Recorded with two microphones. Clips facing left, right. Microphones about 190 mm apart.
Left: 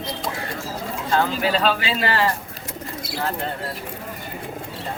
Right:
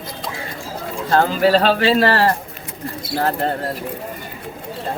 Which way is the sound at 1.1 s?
40° right (ahead or behind).